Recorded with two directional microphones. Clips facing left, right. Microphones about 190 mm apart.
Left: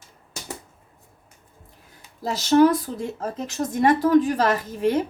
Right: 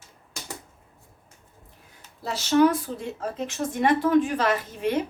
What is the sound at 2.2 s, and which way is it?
Speech, 40° left (ahead or behind).